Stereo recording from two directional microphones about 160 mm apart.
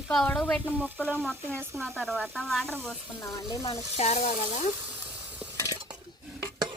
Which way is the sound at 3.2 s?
20° left (ahead or behind).